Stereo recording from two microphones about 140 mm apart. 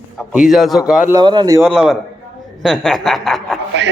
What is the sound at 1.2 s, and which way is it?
Speech, 35° right (ahead or behind).